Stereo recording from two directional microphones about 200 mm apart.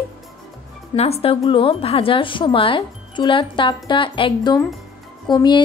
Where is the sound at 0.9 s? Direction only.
30° left (ahead or behind).